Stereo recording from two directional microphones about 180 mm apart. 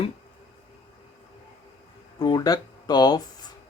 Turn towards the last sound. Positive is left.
turn(degrees=20)  # may be behind; listen again after turning